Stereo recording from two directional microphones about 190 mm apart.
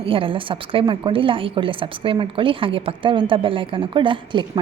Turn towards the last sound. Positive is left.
turn(degrees=-25)  # may be behind; listen again after turning